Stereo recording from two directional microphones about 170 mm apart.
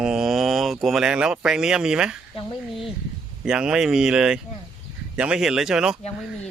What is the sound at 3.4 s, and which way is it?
Speech, 5° right (ahead or behind).